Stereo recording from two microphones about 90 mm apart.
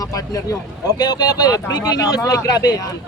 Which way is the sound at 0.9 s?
50° left (ahead or behind).